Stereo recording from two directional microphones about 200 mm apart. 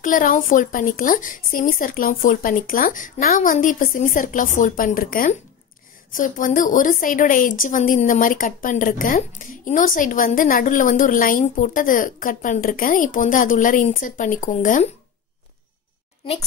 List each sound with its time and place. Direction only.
0.0 s a woman's voice: 40° left (ahead or behind)